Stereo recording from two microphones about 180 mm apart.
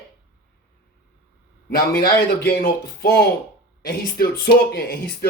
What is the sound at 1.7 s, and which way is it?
Speech, 55° left (ahead or behind).